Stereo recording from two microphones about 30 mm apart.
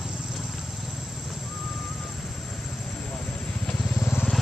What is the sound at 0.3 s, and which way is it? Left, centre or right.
Vehicle, centre.